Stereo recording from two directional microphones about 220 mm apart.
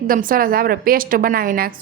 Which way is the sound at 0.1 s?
40° right (ahead or behind).